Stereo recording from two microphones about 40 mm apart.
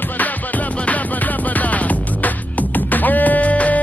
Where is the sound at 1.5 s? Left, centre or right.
Left.